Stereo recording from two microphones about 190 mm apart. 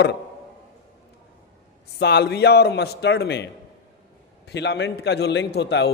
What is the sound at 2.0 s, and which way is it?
A man's voice, 60° left (ahead or behind).